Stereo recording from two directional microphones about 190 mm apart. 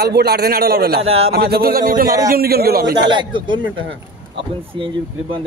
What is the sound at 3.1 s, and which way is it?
Speech, 25° right (ahead or behind).